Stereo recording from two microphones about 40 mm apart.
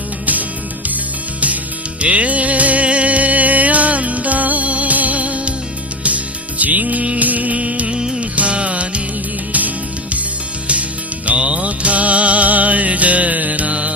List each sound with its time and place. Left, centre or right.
2.0 s music: right
7.9 s music: centre
8.2 s music: right
11.3 s music: right